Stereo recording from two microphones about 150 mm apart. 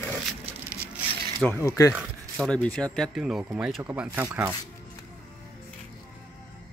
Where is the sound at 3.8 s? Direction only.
15° right (ahead or behind).